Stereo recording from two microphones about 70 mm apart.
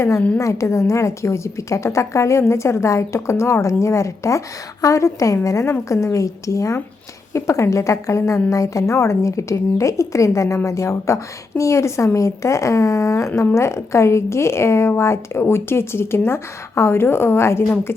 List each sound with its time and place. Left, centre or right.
0.3 s a woman's voice: left